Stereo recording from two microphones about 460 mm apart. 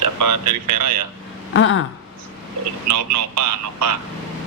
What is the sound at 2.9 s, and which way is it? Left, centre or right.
Speech, right.